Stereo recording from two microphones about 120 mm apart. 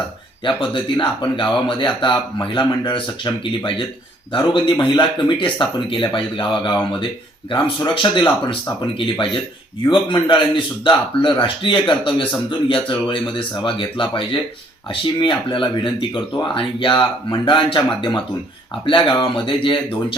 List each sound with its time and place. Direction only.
0.4 s speech: 45° left (ahead or behind)
7.9 s speech: 45° left (ahead or behind)